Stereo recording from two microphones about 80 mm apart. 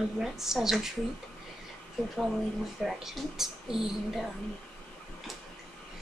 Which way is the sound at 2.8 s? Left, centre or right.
Centre.